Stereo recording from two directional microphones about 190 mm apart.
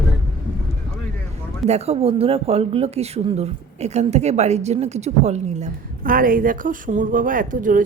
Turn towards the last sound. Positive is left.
turn(degrees=-45)  # may be behind; listen again after turning